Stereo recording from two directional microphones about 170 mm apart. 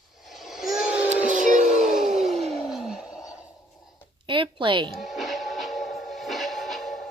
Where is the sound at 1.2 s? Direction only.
45° right (ahead or behind).